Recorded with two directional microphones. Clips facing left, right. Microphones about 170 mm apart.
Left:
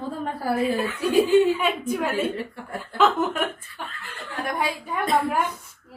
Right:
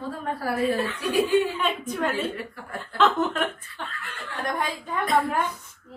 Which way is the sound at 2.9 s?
10° left (ahead or behind).